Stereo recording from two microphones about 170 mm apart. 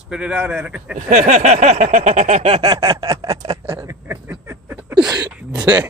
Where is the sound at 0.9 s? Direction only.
45° right (ahead or behind).